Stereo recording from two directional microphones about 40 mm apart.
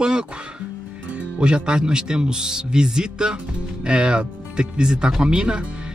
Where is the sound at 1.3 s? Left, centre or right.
Right.